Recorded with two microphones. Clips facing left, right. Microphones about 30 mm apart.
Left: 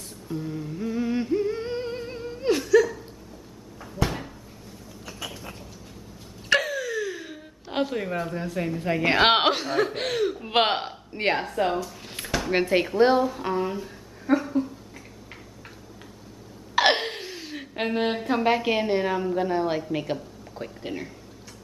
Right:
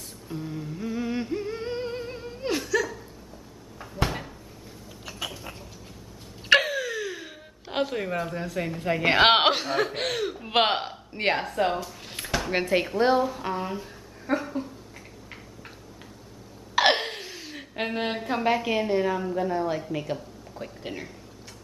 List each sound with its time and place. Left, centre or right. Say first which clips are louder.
0.3 s humming: left 3 dB; centre
5.0 s rodents: right 1 dB; centre
6.5 s speech: right 2 dB; centre
12.0 s a sound: left 1 dB; centre
16.7 s a sound: left 1 dB; centre
18.9 s speech: left 1 dB; left
20.8 s speech: left 3 dB; centre